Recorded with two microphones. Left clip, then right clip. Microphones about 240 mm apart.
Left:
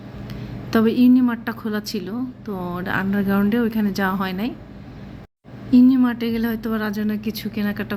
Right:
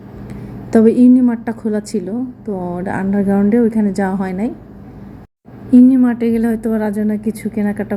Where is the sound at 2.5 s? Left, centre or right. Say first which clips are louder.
Right 7 dB; centre.